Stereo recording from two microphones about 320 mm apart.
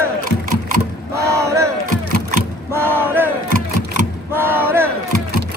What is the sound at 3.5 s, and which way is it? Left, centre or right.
Music, right.